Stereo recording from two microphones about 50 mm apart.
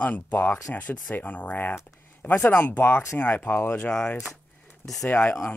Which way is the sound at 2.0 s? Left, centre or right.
Left.